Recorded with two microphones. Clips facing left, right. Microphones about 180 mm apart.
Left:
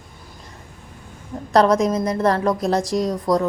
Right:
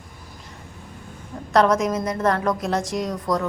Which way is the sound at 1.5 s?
35° left (ahead or behind).